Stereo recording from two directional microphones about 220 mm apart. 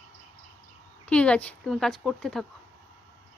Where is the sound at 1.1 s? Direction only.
5° left (ahead or behind).